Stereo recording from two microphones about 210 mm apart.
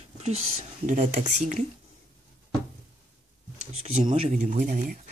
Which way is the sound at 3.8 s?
30° right (ahead or behind).